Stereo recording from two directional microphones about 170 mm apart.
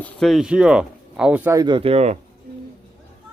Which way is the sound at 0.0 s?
Centre (ahead or behind).